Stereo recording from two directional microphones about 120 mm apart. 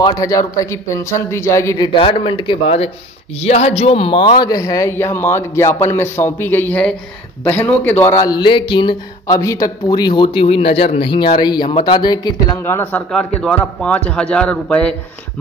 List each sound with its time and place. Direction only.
0.2 s speech: 30° left (ahead or behind)
2.0 s a man's voice: 45° left (ahead or behind); by 7.7 s 15° left (ahead or behind)
8.0 s a man's voice: 30° left (ahead or behind)
9.4 s a man's voice: 25° left (ahead or behind)
12.5 s speech: 20° left (ahead or behind)
13.1 s a man's voice: 5° left (ahead or behind)